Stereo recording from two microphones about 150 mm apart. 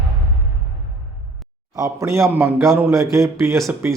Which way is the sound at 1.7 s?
20° right (ahead or behind).